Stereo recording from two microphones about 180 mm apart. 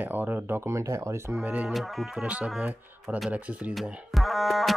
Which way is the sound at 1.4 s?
5° right (ahead or behind).